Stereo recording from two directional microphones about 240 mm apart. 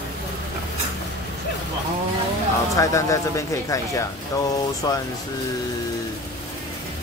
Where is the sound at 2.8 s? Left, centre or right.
Centre.